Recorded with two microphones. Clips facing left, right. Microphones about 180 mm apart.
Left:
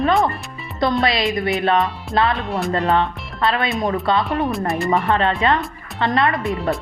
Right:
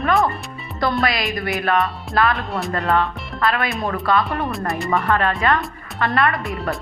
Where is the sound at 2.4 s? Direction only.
Centre (ahead or behind).